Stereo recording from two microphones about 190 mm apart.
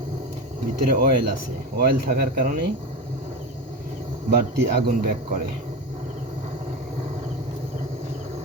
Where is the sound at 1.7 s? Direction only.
50° right (ahead or behind).